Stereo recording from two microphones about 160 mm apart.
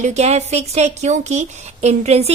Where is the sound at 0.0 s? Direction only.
45° right (ahead or behind).